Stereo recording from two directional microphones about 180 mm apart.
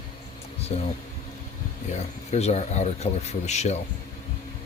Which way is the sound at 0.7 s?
30° left (ahead or behind).